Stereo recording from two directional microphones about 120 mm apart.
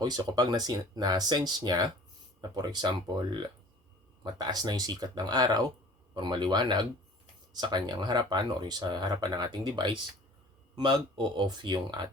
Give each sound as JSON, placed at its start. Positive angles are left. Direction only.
{"t": 0.0, "sound": "speech", "side_deg": -35}